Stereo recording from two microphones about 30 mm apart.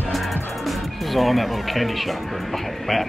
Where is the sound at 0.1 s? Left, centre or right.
Centre.